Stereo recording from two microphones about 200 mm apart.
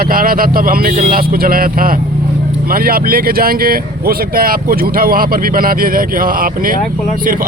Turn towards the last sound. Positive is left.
turn(degrees=-45)  # may be behind; listen again after turning